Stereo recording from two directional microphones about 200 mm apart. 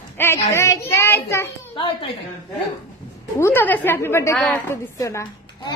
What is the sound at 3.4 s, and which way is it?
A child's voice, 10° left (ahead or behind).